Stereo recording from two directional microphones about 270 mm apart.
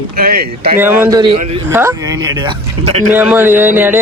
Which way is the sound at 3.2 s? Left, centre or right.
Centre.